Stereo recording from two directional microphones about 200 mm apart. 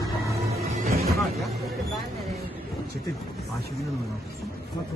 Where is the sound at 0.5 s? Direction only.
30° right (ahead or behind).